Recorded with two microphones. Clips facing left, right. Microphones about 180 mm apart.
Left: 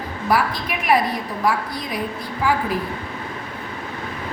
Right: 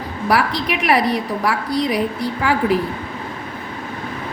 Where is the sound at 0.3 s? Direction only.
75° right (ahead or behind).